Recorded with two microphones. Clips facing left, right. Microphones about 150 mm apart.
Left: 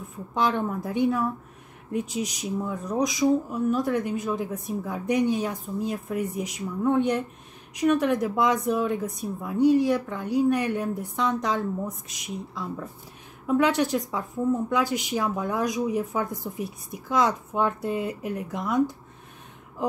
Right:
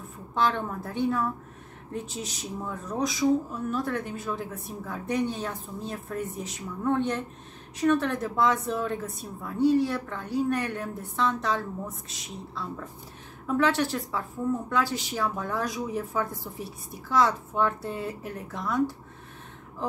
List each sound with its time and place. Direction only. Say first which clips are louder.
0.3 s speech: left 2 dB; 15° left (ahead or behind)
19.8 s speech: left 4 dB; 15° left (ahead or behind)